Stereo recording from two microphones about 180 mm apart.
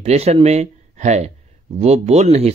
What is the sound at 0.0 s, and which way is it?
Speech, 35° right (ahead or behind).